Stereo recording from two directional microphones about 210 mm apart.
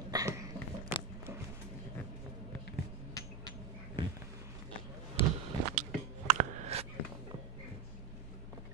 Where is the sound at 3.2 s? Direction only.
15° left (ahead or behind).